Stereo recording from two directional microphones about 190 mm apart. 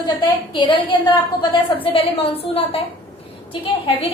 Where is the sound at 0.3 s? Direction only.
25° left (ahead or behind).